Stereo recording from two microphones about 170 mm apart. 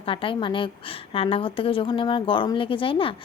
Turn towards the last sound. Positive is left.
turn(degrees=30)  # may be behind; listen again after turning